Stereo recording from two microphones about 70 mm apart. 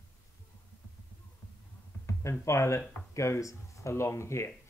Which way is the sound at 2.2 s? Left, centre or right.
Left.